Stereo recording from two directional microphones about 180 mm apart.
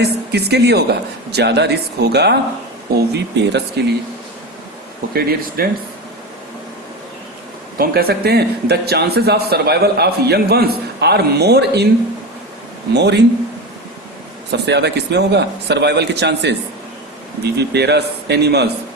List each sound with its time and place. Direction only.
0.0 s a man's voice: 65° right (ahead or behind)
5.6 s speech: 55° right (ahead or behind)
7.8 s speech: 60° right (ahead or behind)
12.9 s a man's voice: 70° right (ahead or behind)
14.5 s a man's voice: 70° right (ahead or behind)